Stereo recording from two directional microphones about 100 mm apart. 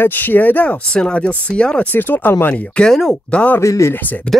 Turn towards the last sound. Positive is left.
turn(degrees=10)  # may be behind; listen again after turning